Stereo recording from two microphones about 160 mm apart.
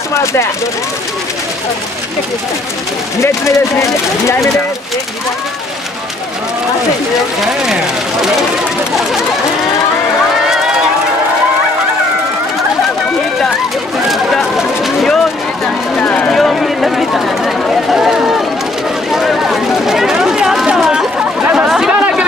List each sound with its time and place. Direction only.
0.1 s speech: 15° left (ahead or behind)
3.2 s speech: 20° left (ahead or behind)
7.6 s speech: 5° right (ahead or behind)
10.5 s run: 5° right (ahead or behind)
14.0 s a sound: centre (ahead or behind)